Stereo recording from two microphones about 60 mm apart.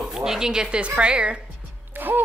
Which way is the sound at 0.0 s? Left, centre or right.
Centre.